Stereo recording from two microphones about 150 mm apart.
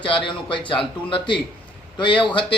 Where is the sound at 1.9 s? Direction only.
35° left (ahead or behind).